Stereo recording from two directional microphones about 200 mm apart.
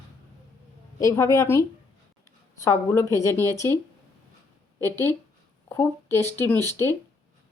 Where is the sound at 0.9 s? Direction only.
15° left (ahead or behind).